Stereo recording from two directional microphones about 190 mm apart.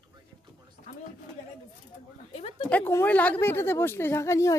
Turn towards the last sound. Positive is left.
turn(degrees=15)  # may be behind; listen again after turning